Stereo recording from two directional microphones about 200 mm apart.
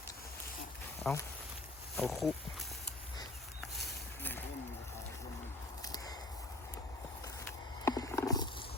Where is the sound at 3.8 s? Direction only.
10° left (ahead or behind).